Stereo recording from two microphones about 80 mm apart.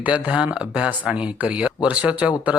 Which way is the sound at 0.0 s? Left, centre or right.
Centre.